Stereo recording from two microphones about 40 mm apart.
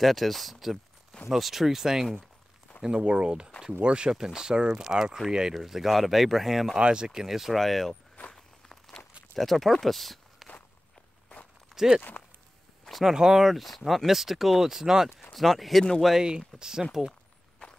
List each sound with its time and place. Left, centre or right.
0.0 s speech: centre
2.8 s speech: right
4.8 s speech: centre
6.8 s speech: right; by 7.9 s centre
8.3 s walk: centre
9.3 s speech: centre
11.7 s a sound: centre
13.0 s speech: centre
15.3 s speech: centre
16.2 s speech: centre